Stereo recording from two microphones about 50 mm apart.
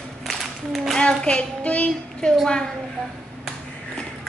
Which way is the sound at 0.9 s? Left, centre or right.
Centre.